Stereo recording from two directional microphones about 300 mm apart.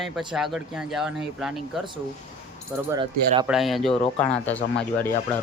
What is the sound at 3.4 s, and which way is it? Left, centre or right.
Speech, centre.